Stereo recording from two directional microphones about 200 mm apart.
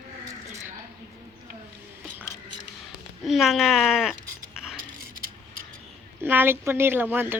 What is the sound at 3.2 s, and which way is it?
Speech, centre (ahead or behind).